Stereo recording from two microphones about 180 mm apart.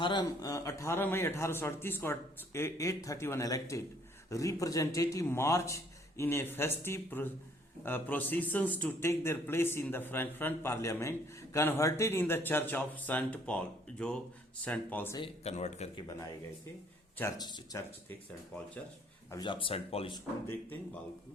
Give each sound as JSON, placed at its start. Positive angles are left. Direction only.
{"t": 0.0, "sound": "speech", "side_deg": 25}
{"t": 15.2, "sound": "speech", "side_deg": 35}
{"t": 17.2, "sound": "speech", "side_deg": 20}
{"t": 19.3, "sound": "speech", "side_deg": 25}